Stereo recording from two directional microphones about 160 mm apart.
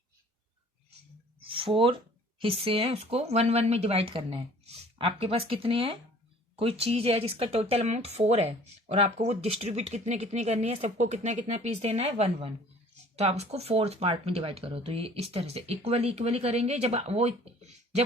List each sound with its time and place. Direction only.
1.5 s speech: 35° right (ahead or behind)